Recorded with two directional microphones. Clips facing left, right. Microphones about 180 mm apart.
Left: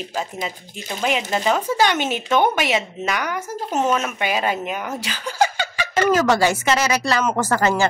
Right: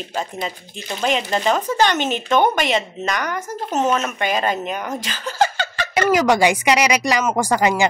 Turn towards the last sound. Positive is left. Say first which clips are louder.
# right 1 dB
turn(degrees=-15)  # may be behind; listen again after turning